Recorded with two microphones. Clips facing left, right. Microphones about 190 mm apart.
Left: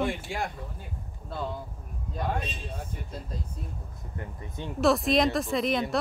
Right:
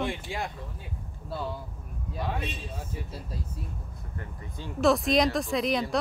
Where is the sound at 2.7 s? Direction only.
5° right (ahead or behind).